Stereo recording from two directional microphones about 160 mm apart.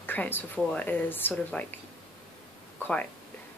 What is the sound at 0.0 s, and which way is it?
Speech, 10° left (ahead or behind).